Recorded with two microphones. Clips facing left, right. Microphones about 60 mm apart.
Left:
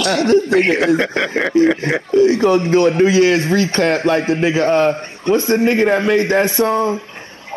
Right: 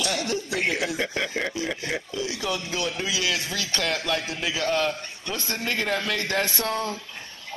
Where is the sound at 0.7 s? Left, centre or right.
Left.